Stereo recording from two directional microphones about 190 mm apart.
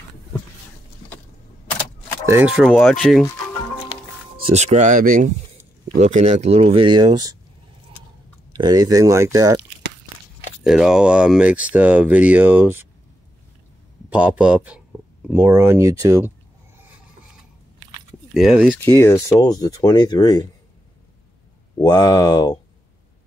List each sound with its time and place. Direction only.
2.2 s speech: 10° right (ahead or behind)
4.5 s speech: 40° right (ahead or behind); by 7.3 s 20° right (ahead or behind)
8.5 s speech: 20° right (ahead or behind)
10.6 s speech: 5° right (ahead or behind)
14.1 s speech: 5° right (ahead or behind)
18.3 s speech: centre (ahead or behind)
18.7 s speech: 10° left (ahead or behind)
21.8 s speech: 20° left (ahead or behind)